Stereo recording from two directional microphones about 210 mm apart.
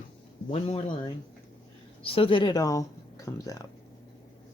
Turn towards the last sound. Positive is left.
turn(degrees=15)  # may be behind; listen again after turning